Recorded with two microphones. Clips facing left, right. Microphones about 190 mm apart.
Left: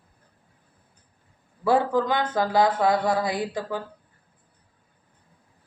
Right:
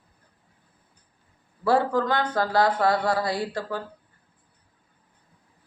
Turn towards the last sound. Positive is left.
turn(degrees=20)  # may be behind; listen again after turning